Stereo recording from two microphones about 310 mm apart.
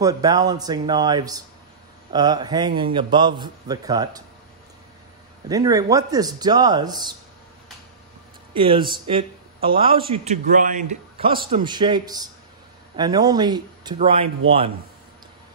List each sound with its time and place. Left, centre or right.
0.0 s a man's voice: centre
5.5 s a man's voice: centre
8.5 s a man's voice: centre